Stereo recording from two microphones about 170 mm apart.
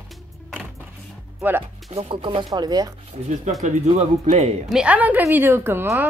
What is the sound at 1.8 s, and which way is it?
Speech, 35° right (ahead or behind).